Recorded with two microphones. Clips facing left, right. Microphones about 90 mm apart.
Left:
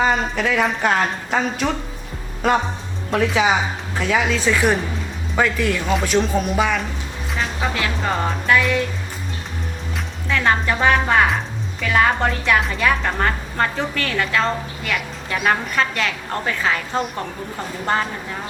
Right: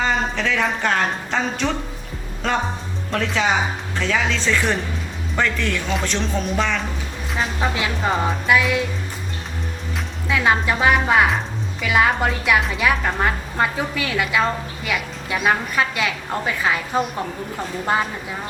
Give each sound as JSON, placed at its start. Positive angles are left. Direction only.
{"t": 0.0, "sound": "a woman's voice", "side_deg": 10}
{"t": 7.7, "sound": "a woman's voice", "side_deg": -15}
{"t": 8.1, "sound": "music", "side_deg": -5}
{"t": 10.2, "sound": "a woman's voice", "side_deg": -10}